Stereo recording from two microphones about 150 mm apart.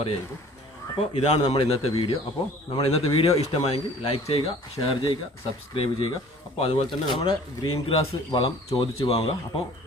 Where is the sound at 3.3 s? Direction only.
45° left (ahead or behind).